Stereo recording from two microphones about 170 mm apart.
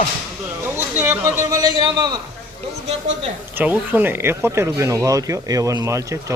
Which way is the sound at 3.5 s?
10° right (ahead or behind).